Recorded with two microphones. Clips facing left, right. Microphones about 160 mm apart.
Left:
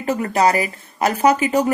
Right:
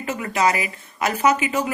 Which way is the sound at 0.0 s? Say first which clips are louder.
Left 4 dB; 40° left (ahead or behind).